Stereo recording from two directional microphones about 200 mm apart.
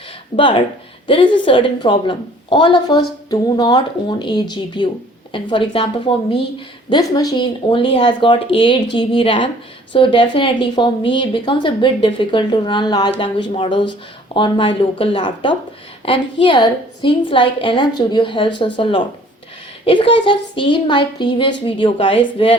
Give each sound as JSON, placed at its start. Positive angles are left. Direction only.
{"t": 0.3, "sound": "a woman's voice", "side_deg": 25}